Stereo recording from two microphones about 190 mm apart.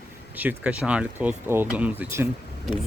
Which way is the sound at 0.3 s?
5° right (ahead or behind).